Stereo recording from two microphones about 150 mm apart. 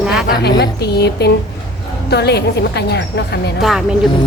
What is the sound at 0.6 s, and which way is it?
A woman's voice, 90° left.